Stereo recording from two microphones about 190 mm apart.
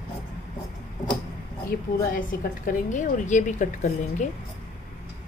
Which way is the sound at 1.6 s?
45° left (ahead or behind).